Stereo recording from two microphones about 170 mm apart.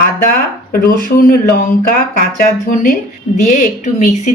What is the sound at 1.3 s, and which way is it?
Speech, 60° left (ahead or behind).